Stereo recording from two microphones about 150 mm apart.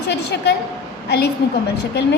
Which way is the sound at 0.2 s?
90° left.